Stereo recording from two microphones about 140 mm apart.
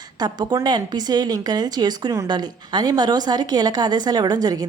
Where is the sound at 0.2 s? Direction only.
30° right (ahead or behind).